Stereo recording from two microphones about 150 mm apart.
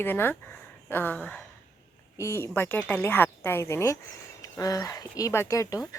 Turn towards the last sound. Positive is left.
turn(degrees=20)  # may be behind; listen again after turning